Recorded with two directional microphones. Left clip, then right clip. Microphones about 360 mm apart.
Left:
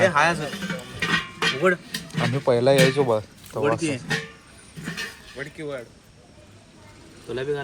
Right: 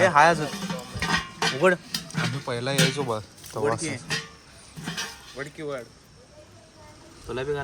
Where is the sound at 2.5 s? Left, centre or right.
Centre.